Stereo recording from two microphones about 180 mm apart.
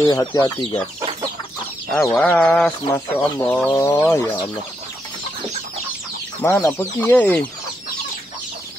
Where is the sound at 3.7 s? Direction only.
20° left (ahead or behind).